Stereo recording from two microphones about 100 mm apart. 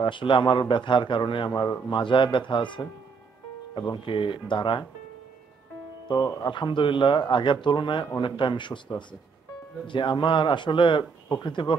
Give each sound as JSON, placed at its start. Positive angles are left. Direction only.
{"t": 0.0, "sound": "a man's voice", "side_deg": 55}
{"t": 6.2, "sound": "speech", "side_deg": 30}
{"t": 6.5, "sound": "a man's voice", "side_deg": 55}